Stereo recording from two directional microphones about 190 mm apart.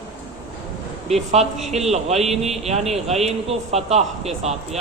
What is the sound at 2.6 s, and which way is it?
A man's voice, 35° right (ahead or behind).